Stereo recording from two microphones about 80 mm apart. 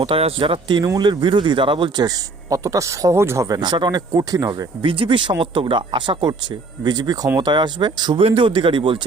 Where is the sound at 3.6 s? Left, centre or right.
Right.